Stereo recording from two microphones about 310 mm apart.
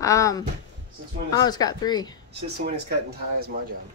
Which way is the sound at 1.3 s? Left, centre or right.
Centre.